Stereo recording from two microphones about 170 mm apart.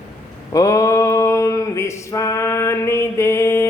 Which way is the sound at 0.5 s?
20° left (ahead or behind).